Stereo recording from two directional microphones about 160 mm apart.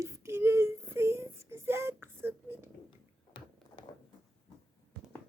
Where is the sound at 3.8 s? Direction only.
30° left (ahead or behind).